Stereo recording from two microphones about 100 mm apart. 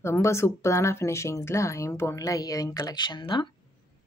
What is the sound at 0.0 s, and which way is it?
Speech, 30° left (ahead or behind).